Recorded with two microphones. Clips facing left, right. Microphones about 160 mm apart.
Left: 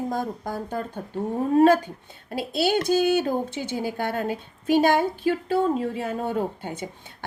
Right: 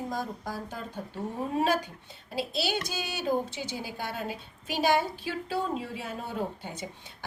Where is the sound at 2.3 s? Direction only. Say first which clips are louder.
Left 7 dB; 55° left (ahead or behind).